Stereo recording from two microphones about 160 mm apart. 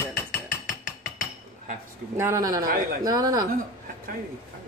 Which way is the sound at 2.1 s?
15° right (ahead or behind).